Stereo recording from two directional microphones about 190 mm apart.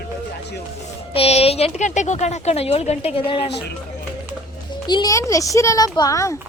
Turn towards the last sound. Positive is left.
turn(degrees=15)  # may be behind; listen again after turning